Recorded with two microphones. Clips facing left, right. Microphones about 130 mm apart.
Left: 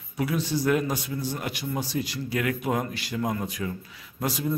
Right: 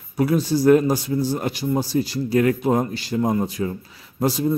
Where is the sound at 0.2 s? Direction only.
40° right (ahead or behind).